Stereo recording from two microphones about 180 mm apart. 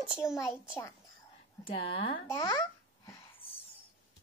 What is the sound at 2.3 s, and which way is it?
Babbling, 15° left (ahead or behind).